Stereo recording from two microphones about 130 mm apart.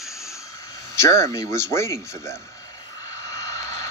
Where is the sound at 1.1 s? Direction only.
25° left (ahead or behind).